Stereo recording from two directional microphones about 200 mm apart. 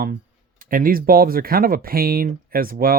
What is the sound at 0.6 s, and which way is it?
Speech, 45° right (ahead or behind).